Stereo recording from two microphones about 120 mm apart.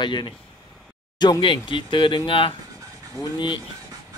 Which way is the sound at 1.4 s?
45° left (ahead or behind).